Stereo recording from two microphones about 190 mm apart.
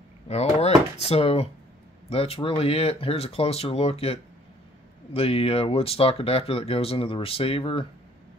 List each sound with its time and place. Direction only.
0.3 s speech: 35° left (ahead or behind)